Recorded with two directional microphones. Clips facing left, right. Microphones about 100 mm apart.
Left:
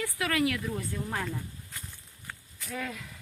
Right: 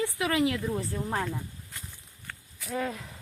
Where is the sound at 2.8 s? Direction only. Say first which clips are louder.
Right 5 dB; 30° right (ahead or behind).